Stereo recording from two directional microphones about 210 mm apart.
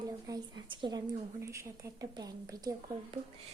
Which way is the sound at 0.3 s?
20° right (ahead or behind).